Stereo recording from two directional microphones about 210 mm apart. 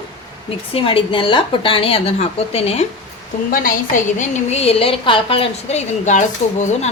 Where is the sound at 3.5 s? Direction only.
40° left (ahead or behind).